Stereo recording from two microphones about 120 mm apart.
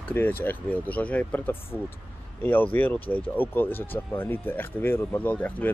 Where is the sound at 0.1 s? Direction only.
15° left (ahead or behind).